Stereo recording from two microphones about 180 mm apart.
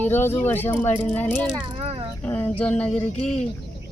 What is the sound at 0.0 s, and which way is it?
Speech, 10° left (ahead or behind).